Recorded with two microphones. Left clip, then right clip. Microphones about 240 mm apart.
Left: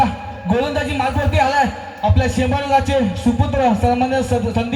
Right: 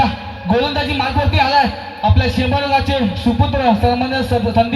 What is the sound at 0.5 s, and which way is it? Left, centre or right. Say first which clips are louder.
A man's voice: right 2 dB; left.